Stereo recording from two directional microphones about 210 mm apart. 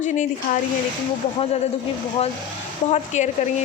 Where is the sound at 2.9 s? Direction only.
35° left (ahead or behind).